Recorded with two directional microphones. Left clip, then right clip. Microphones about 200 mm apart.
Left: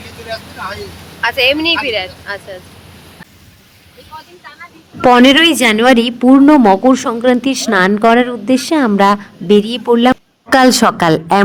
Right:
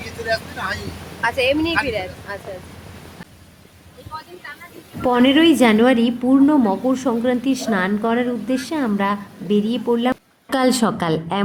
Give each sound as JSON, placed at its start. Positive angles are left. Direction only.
{"t": 1.2, "sound": "speech", "side_deg": -5}
{"t": 5.0, "sound": "a woman's voice", "side_deg": 45}